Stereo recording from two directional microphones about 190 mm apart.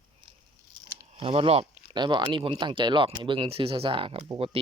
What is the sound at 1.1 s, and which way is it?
Speech, 30° right (ahead or behind).